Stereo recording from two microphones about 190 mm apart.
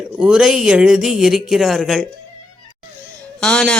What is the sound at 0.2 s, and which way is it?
Speech, 5° right (ahead or behind).